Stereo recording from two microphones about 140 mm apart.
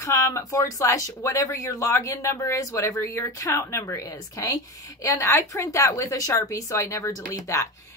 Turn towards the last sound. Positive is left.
turn(degrees=20)  # may be behind; listen again after turning